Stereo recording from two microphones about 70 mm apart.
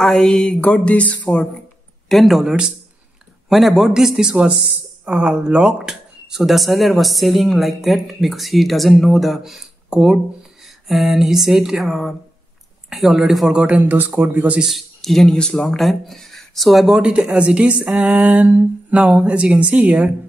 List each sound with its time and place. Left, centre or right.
0.0 s a sound: centre
0.8 s speech: left
2.0 s speech: centre
13.5 s speech: centre
14.6 s speech: centre
17.0 s a sound: centre